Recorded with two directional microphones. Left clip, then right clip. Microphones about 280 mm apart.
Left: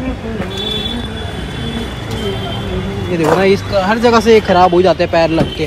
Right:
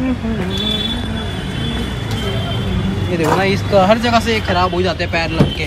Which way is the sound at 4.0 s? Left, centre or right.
Centre.